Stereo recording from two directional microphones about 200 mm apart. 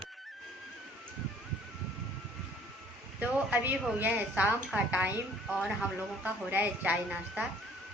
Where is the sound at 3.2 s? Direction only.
5° right (ahead or behind).